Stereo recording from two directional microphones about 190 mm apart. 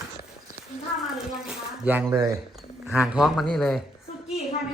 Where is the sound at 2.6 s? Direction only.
5° right (ahead or behind).